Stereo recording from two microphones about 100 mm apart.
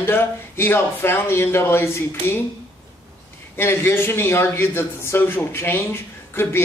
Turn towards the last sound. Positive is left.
turn(degrees=25)  # may be behind; listen again after turning